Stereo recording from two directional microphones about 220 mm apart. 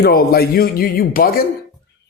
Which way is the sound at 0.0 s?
45° left (ahead or behind).